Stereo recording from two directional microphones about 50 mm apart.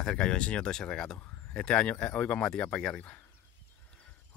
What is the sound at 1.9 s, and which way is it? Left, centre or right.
Speech, left.